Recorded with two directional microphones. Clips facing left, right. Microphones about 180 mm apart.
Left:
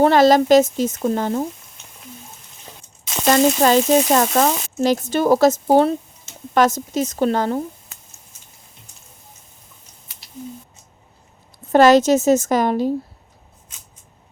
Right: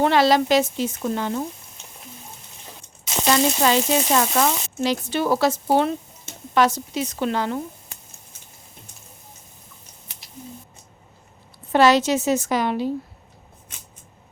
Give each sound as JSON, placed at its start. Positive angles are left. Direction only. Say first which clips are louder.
{"t": 0.0, "sound": "speech", "louder": "left 5 dB", "side_deg": 45}
{"t": 3.2, "sound": "speech", "louder": "left 5 dB", "side_deg": 45}
{"t": 11.7, "sound": "speech", "louder": "left 5 dB", "side_deg": 45}